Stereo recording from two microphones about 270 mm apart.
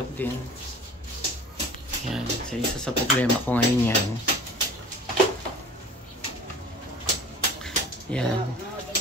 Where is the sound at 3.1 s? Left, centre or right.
Centre.